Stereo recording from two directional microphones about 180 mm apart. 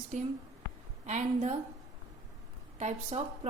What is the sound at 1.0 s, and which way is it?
Speech, 40° right (ahead or behind).